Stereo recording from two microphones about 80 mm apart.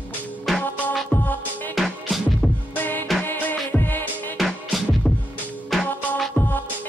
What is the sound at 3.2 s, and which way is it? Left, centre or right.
Music, left.